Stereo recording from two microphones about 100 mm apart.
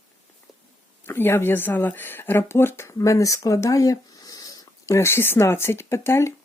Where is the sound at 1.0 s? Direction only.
20° left (ahead or behind).